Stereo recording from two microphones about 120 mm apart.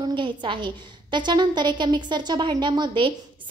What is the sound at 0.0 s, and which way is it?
A woman's voice, 40° right (ahead or behind).